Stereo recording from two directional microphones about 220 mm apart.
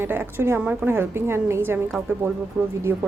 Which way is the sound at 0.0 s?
10° right (ahead or behind).